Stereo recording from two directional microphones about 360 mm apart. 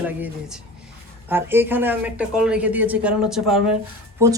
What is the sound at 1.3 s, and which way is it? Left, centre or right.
Speech, centre.